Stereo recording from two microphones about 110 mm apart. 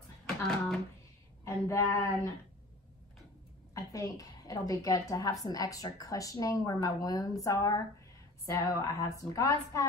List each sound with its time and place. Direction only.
1.4 s a woman's voice: 25° left (ahead or behind)
3.7 s a woman's voice: 30° left (ahead or behind)